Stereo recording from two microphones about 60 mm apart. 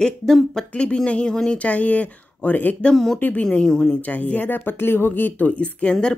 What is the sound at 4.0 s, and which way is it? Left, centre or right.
Speech, left.